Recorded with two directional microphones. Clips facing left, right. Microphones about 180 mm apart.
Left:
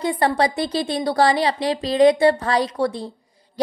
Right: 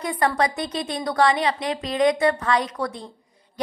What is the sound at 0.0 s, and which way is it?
A woman's voice, 30° left (ahead or behind).